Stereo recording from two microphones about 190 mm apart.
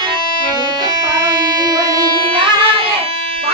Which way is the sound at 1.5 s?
20° right (ahead or behind).